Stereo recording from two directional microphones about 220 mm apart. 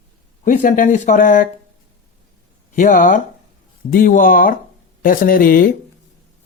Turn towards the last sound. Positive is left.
turn(degrees=40)  # may be behind; listen again after turning